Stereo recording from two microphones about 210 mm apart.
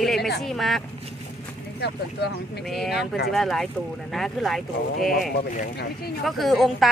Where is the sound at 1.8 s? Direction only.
50° left (ahead or behind).